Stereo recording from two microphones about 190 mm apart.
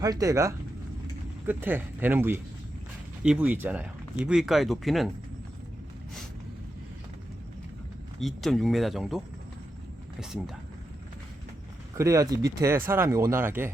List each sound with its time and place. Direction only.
0.0 s speech: 20° right (ahead or behind); by 5.1 s centre (ahead or behind)
8.2 s speech: centre (ahead or behind)
11.9 s speech: 15° right (ahead or behind)